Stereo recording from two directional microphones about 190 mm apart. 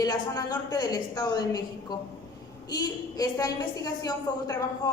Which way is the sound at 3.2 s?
20° left (ahead or behind).